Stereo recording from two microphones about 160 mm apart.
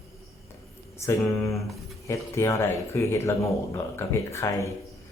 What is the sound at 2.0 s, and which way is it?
Speech, 15° left (ahead or behind).